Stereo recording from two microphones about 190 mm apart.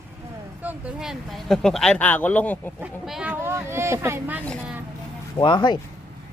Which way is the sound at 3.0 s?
5° right (ahead or behind).